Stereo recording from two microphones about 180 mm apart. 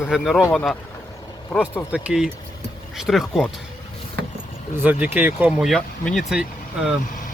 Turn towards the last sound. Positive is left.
turn(degrees=-5)  # may be behind; listen again after turning